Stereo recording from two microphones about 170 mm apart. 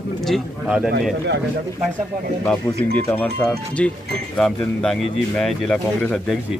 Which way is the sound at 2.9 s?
10° left (ahead or behind).